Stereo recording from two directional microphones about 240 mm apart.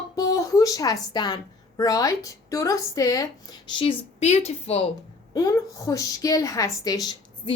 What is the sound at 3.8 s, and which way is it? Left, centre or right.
A woman's voice, left.